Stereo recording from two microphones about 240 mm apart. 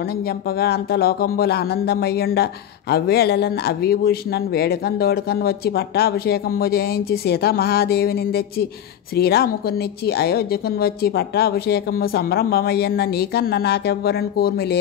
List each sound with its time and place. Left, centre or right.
0.5 s speech: left